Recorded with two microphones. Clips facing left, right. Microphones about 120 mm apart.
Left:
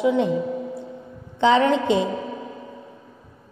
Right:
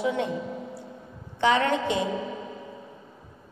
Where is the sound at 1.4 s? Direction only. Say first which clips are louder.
Left 5 dB; 20° left (ahead or behind).